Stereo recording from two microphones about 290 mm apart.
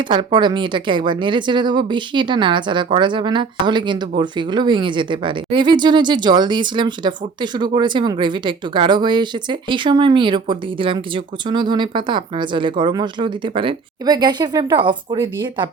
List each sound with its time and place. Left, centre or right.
0.0 s speech: centre